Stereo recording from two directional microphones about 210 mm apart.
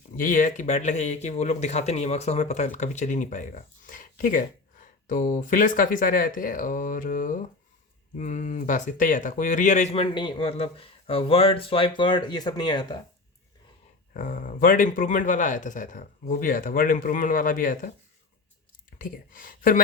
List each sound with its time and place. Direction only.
0.2 s speech: 40° left (ahead or behind); by 13.0 s 20° left (ahead or behind)
14.1 s speech: 40° left (ahead or behind)
18.9 s speech: 40° left (ahead or behind)